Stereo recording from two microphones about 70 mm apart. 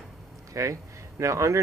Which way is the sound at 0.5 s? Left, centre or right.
Right.